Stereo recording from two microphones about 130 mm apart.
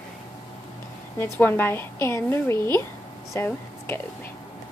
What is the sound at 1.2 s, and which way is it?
A woman's voice, 15° left (ahead or behind).